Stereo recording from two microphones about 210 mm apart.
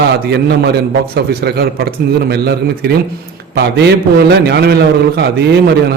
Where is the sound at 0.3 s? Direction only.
50° right (ahead or behind).